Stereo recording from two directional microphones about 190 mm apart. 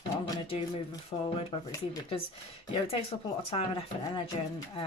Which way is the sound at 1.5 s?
25° left (ahead or behind).